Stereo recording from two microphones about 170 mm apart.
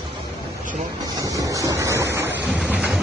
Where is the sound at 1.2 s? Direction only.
20° right (ahead or behind).